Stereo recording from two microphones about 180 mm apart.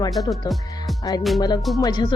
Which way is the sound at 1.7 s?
20° left (ahead or behind).